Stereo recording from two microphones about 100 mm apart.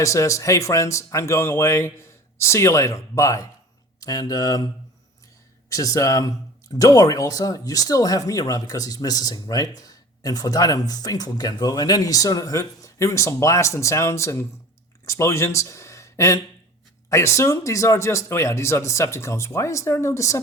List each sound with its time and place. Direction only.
0.0 s speech: 30° left (ahead or behind)
5.6 s speech: 35° left (ahead or behind)